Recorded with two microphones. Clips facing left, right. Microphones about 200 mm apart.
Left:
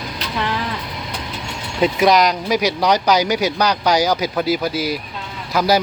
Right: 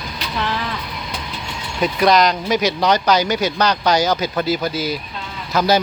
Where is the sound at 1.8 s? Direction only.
15° left (ahead or behind).